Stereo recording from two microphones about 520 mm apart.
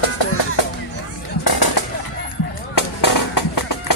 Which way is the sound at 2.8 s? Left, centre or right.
Left.